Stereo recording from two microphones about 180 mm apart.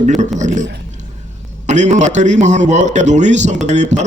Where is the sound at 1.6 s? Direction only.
40° right (ahead or behind).